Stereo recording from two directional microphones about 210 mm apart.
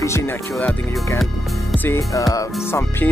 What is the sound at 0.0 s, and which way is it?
Speech, 10° left (ahead or behind).